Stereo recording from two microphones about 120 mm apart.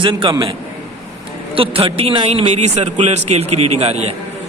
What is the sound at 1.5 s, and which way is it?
A man's voice, 50° right (ahead or behind).